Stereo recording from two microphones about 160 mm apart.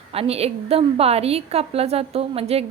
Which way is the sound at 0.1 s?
40° right (ahead or behind).